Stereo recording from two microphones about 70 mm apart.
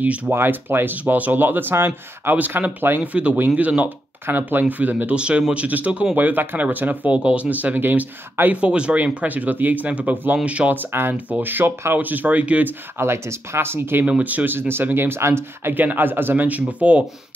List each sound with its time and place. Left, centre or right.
0.0 s speech: centre
0.3 s speech: right
3.0 s speech: centre; by 11.1 s right
11.1 s speech: right
12.9 s speech: right
14.0 s speech: right